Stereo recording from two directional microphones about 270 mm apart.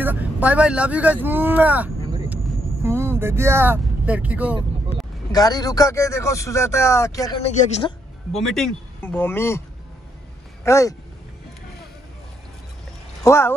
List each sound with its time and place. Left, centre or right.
0.0 s speech: centre
5.3 s speech: centre
7.4 s speech: left
8.4 s speech: centre
10.6 s speech: centre
13.2 s speech: centre